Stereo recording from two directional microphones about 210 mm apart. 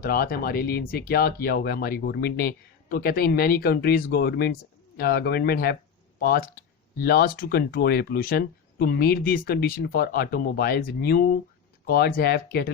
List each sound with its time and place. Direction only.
0.0 s speech: 45° left (ahead or behind)